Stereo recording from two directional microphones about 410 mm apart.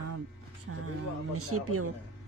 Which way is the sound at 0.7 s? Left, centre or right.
Right.